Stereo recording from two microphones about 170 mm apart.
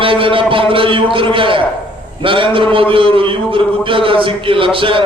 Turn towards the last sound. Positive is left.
turn(degrees=-30)  # may be behind; listen again after turning